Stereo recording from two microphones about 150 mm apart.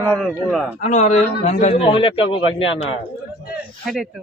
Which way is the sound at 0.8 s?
50° left (ahead or behind).